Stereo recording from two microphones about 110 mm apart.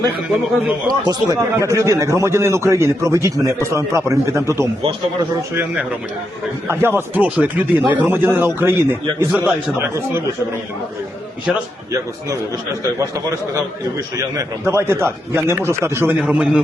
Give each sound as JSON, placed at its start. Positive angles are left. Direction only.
{"t": 0.9, "sound": "speech", "side_deg": -35}
{"t": 6.7, "sound": "a man's voice", "side_deg": -20}
{"t": 14.6, "sound": "speech", "side_deg": -25}
{"t": 16.2, "sound": "a man's voice", "side_deg": -10}